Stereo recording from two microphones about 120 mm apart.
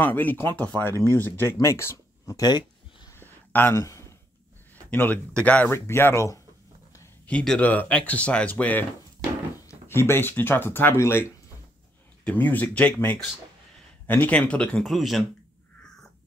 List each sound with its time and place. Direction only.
0.0 s speech: 15° left (ahead or behind); by 3.1 s 35° left (ahead or behind)
3.1 s a sound: 20° left (ahead or behind)
4.9 s speech: 15° left (ahead or behind)
7.2 s speech: 10° left (ahead or behind)
12.3 s speech: 15° left (ahead or behind)
14.0 s speech: 15° left (ahead or behind); by 15.2 s centre (ahead or behind)